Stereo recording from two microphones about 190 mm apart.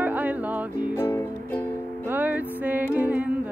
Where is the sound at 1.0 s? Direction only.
15° left (ahead or behind).